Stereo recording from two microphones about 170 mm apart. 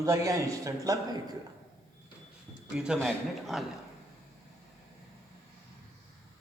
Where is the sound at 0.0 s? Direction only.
20° right (ahead or behind).